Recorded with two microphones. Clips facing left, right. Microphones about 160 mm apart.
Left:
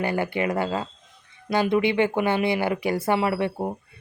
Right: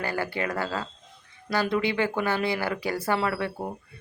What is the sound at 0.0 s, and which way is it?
Speech, 20° left (ahead or behind).